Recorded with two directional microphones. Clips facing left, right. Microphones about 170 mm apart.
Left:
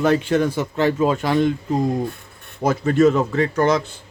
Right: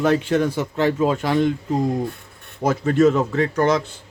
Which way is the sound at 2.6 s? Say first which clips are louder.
Left 1 dB; 15° left (ahead or behind).